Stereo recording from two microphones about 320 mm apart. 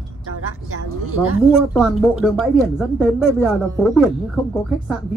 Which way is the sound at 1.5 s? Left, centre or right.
Centre.